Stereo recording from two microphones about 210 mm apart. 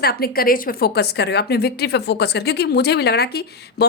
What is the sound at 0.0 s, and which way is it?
A woman's voice, 45° left (ahead or behind).